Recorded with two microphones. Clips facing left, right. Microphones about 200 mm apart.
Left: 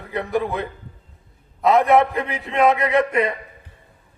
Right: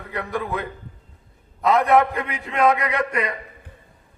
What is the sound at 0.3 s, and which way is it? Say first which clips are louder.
Speech: left 4 dB; 25° left (ahead or behind).